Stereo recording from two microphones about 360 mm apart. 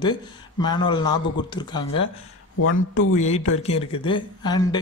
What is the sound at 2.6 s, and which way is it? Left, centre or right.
Speech, left.